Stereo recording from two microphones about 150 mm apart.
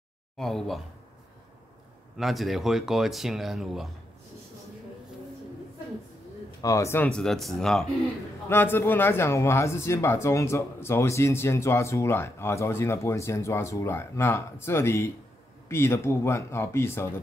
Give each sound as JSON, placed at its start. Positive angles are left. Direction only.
{"t": 0.4, "sound": "speech", "side_deg": 5}
{"t": 2.1, "sound": "speech", "side_deg": 0}
{"t": 6.6, "sound": "speech", "side_deg": 20}
{"t": 7.1, "sound": "speech", "side_deg": 5}
{"t": 8.5, "sound": "a man's voice", "side_deg": 15}